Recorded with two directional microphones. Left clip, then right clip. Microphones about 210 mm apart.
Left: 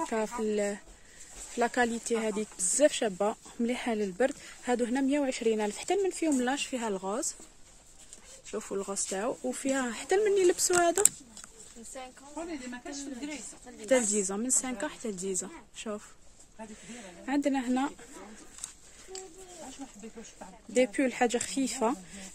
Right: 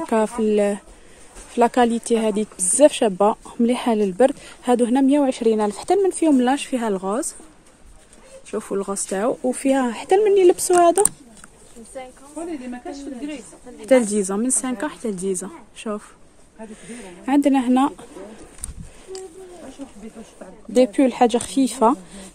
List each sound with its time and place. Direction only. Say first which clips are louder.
0.1 s speech: right 12 dB; 25° right (ahead or behind)
8.5 s speech: right 10 dB; 15° right (ahead or behind)
13.7 s speech: right 10 dB; 15° right (ahead or behind)
20.7 s speech: right 10 dB; 15° right (ahead or behind)